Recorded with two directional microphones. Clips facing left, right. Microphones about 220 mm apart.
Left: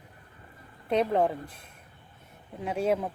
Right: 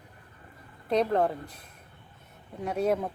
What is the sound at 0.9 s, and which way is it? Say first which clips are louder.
Speech: even; 5° left (ahead or behind).